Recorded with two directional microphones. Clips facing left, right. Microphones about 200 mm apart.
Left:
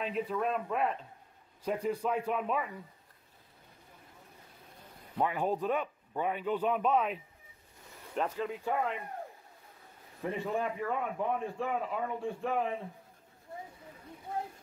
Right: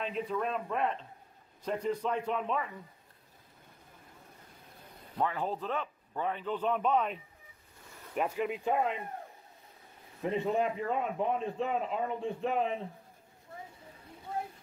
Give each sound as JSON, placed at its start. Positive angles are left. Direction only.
{"t": 0.0, "sound": "a man's voice", "side_deg": 5}
{"t": 5.1, "sound": "a man's voice", "side_deg": 15}
{"t": 8.1, "sound": "speech", "side_deg": -10}
{"t": 10.2, "sound": "a man's voice", "side_deg": -20}